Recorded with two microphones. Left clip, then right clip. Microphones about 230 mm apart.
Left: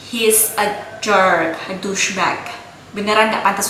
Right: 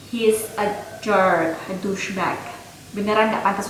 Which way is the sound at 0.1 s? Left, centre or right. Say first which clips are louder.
Left 3 dB; centre.